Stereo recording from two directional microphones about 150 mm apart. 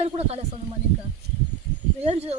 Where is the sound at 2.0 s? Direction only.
40° right (ahead or behind).